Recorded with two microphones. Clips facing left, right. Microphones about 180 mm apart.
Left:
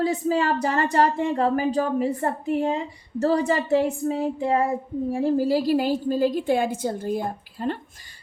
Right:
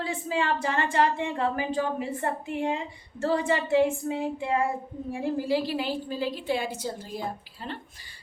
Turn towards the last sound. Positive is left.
turn(degrees=50)  # may be behind; listen again after turning